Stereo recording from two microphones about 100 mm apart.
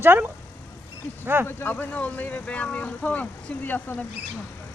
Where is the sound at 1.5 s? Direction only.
20° left (ahead or behind).